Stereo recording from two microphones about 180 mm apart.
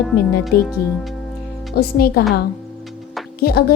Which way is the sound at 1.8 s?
55° left (ahead or behind).